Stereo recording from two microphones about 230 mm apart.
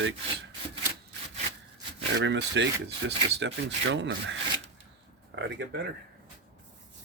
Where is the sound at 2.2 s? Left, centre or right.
Right.